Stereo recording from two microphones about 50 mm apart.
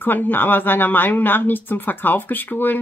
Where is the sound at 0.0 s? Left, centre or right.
Left.